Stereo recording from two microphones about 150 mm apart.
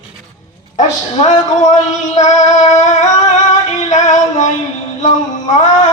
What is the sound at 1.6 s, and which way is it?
Music, 55° left (ahead or behind).